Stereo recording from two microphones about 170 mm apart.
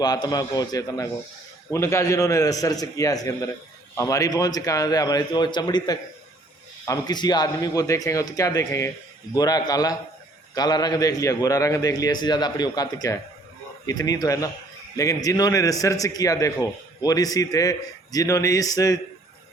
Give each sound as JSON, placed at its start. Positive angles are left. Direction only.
{"t": 0.0, "sound": "a man's voice", "side_deg": 25}